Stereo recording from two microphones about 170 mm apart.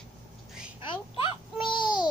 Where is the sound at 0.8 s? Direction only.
30° left (ahead or behind).